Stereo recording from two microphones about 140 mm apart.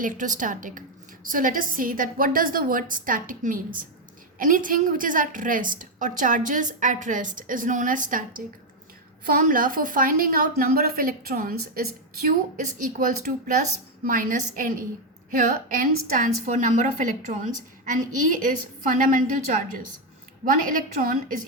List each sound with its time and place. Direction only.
0.0 s a woman's voice: 70° right (ahead or behind)
9.2 s a woman's voice: 85° right